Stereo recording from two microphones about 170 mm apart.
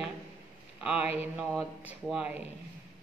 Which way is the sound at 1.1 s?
10° right (ahead or behind).